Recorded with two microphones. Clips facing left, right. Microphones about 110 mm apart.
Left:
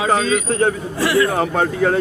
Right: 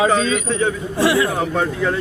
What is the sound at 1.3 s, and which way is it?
Speech, 55° left (ahead or behind).